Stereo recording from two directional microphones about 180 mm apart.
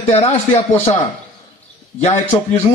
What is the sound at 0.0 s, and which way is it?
A man's voice, 35° left (ahead or behind).